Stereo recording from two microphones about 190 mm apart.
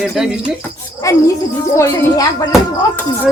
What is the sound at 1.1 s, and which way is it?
Speech, 15° left (ahead or behind).